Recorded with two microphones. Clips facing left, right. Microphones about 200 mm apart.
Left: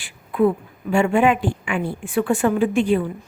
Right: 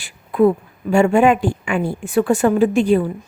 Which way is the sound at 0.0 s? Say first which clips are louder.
Right 4 dB; 40° right (ahead or behind).